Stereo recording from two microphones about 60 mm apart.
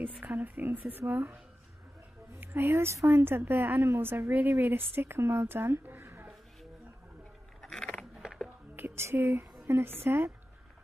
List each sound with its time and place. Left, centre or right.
0.0 s a woman's voice: right
2.4 s a woman's voice: right
7.6 s keys jangling: centre
8.2 s music: centre
8.7 s speech: right